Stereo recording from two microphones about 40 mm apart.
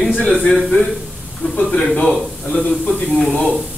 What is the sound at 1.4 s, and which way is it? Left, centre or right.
Speech, left.